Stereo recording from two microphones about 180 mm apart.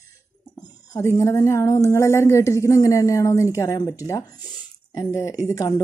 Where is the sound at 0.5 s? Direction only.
20° left (ahead or behind).